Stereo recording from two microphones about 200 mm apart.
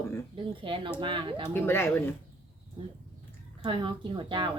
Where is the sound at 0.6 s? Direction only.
25° right (ahead or behind).